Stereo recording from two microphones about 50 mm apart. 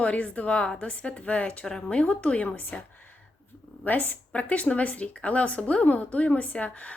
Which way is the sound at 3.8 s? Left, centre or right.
Left.